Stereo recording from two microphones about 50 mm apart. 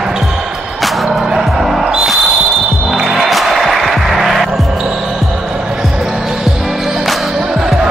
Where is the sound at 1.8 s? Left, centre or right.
Centre.